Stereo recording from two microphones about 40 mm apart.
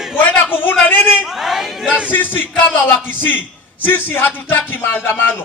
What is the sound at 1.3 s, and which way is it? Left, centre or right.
Chatter, centre.